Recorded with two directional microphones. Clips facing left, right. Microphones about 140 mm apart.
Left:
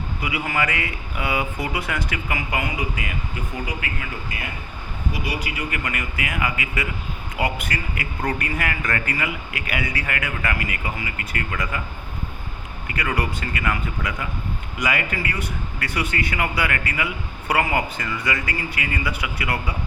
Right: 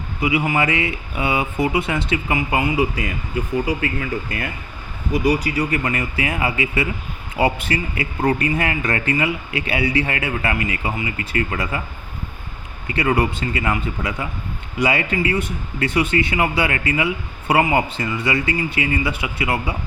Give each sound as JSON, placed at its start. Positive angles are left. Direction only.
{"t": 0.2, "sound": "speech", "side_deg": -25}
{"t": 4.3, "sound": "speech", "side_deg": -50}
{"t": 12.9, "sound": "speech", "side_deg": -25}